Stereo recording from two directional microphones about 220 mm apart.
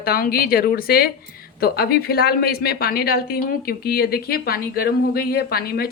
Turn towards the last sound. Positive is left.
turn(degrees=45)  # may be behind; listen again after turning